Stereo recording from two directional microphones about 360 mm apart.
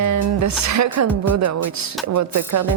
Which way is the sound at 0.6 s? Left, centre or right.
Right.